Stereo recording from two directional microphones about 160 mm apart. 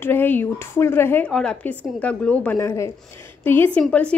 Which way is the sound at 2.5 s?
20° left (ahead or behind).